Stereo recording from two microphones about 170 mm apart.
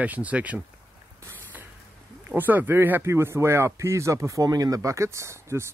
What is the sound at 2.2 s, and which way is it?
Speech, 10° right (ahead or behind).